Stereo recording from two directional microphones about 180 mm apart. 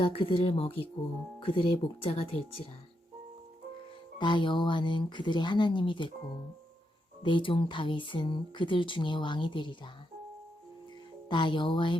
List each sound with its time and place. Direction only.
0.0 s speech: 30° left (ahead or behind)
4.2 s speech: 25° left (ahead or behind)
7.2 s speech: 25° left (ahead or behind)
11.3 s speech: 25° left (ahead or behind)